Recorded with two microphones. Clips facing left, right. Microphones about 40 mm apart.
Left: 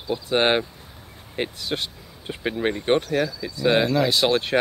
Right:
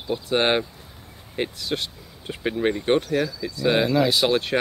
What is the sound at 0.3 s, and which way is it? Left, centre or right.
Speech, centre.